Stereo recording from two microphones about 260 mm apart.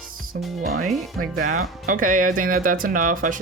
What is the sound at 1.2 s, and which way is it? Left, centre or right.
Speech, right.